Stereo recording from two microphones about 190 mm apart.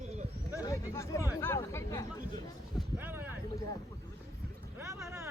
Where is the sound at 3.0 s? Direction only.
10° right (ahead or behind).